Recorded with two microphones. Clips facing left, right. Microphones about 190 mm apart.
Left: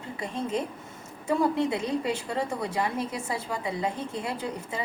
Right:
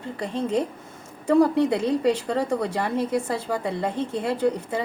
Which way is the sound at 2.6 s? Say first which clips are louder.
Right 4 dB; 60° right (ahead or behind).